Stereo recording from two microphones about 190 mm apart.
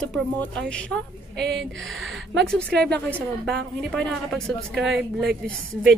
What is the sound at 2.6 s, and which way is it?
Speech, 55° right (ahead or behind).